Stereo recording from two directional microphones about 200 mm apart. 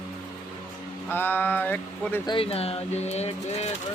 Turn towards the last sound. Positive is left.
turn(degrees=35)  # may be behind; listen again after turning